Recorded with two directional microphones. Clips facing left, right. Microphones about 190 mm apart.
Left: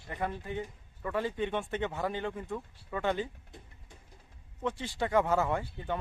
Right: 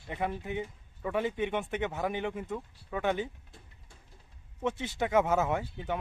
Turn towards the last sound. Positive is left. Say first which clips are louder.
# right 1 dB
turn(degrees=-15)  # may be behind; listen again after turning